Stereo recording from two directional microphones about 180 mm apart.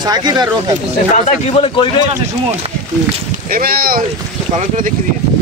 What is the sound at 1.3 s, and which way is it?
Speech, 35° left (ahead or behind).